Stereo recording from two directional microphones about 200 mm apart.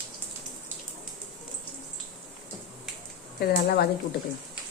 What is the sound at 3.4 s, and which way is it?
Speech, 50° left (ahead or behind).